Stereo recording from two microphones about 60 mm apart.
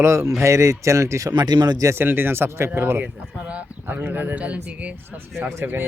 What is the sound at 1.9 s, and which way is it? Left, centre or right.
Speech, right.